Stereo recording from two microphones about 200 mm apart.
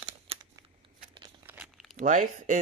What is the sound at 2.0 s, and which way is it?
Speech, 40° right (ahead or behind).